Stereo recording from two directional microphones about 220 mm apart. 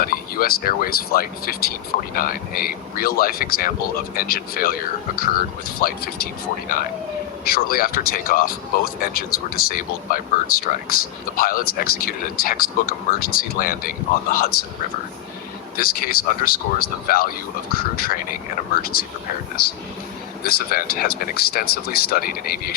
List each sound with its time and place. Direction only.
0.0 s speech: 40° left (ahead or behind)
7.4 s speech: 40° left (ahead or behind)
15.7 s speech: 40° left (ahead or behind)
20.4 s speech: 45° left (ahead or behind)